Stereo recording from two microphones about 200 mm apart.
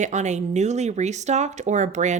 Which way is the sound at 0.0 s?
35° right (ahead or behind).